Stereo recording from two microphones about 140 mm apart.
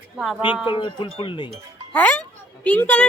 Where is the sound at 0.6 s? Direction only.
35° left (ahead or behind).